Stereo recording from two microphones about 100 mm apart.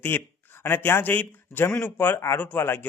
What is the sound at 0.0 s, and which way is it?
A man's voice, 20° left (ahead or behind).